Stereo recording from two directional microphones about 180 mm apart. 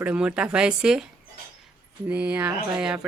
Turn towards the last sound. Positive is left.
turn(degrees=-5)  # may be behind; listen again after turning